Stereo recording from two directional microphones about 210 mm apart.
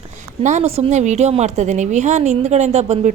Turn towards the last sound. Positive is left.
turn(degrees=-30)  # may be behind; listen again after turning